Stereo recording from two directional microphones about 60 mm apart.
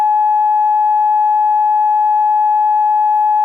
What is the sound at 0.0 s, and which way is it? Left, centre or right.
Sine wave, right.